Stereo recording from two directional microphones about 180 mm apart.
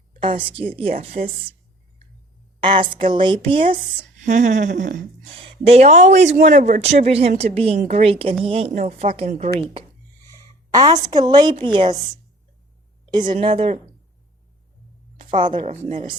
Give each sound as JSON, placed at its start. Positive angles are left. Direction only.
{"t": 0.2, "sound": "a woman's voice", "side_deg": -30}
{"t": 2.6, "sound": "a woman's voice", "side_deg": -30}
{"t": 4.2, "sound": "a sound", "side_deg": -40}
{"t": 5.4, "sound": "speech", "side_deg": -35}
{"t": 7.8, "sound": "a sound", "side_deg": -45}
{"t": 8.0, "sound": "speech", "side_deg": -30}
{"t": 8.7, "sound": "speech", "side_deg": -40}
{"t": 10.7, "sound": "a woman's voice", "side_deg": -20}
{"t": 13.1, "sound": "a woman's voice", "side_deg": -25}
{"t": 15.3, "sound": "a woman's voice", "side_deg": -25}